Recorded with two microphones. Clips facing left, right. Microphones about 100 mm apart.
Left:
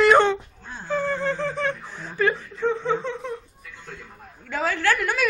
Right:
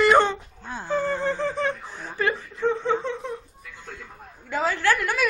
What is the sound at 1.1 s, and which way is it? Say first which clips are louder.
Speech: even; 20° right (ahead or behind).